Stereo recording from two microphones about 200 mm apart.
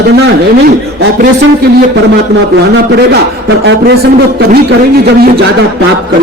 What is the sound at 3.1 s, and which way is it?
A man's voice, 55° right (ahead or behind).